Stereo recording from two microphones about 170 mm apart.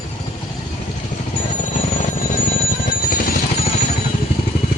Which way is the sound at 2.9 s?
60° left (ahead or behind).